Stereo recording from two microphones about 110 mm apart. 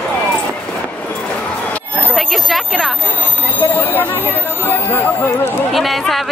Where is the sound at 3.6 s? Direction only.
20° left (ahead or behind).